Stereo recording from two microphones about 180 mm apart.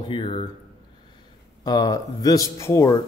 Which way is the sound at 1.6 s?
20° left (ahead or behind).